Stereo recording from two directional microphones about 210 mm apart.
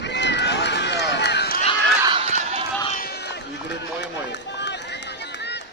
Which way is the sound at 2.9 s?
45° left (ahead or behind).